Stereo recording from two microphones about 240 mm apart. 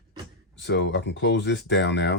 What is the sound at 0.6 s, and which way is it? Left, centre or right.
Speech, left.